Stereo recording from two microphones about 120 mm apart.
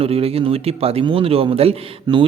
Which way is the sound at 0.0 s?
55° right (ahead or behind).